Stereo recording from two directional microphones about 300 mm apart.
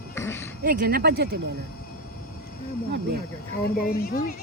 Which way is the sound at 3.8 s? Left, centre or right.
Left.